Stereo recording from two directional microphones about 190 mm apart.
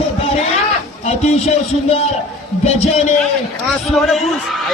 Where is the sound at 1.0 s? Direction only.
35° left (ahead or behind).